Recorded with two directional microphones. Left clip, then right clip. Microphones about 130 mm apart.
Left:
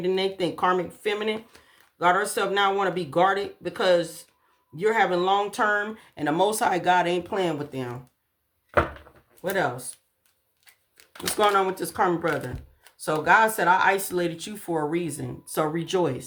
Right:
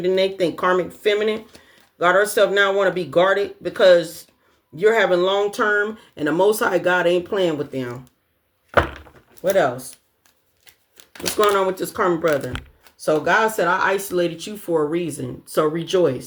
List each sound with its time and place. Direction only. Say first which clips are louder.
0.0 s speech: right 6 dB; 35° left (ahead or behind)
9.4 s speech: right 8 dB; 40° left (ahead or behind)
11.3 s speech: right 4 dB; 40° left (ahead or behind)